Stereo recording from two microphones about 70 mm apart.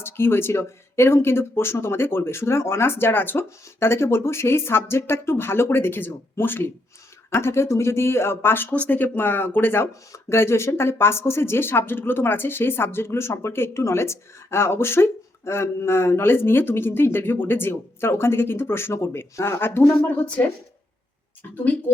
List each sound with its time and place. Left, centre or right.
0.0 s speech: left
20.1 s speech: centre
21.5 s speech: left